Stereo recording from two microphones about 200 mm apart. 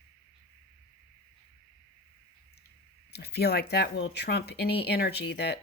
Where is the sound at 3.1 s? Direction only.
55° left (ahead or behind).